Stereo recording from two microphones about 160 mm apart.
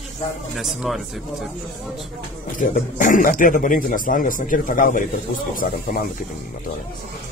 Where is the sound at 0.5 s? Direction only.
Centre (ahead or behind).